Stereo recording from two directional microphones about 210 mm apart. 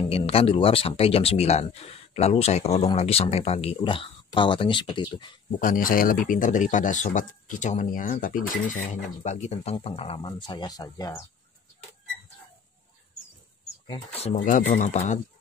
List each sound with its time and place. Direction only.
0.1 s speech: 25° left (ahead or behind)
5.6 s speech: 40° left (ahead or behind); by 11.2 s 15° left (ahead or behind)
13.8 s speech: 30° left (ahead or behind)